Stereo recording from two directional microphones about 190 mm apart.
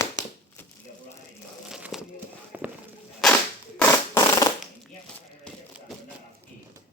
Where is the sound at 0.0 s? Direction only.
15° left (ahead or behind).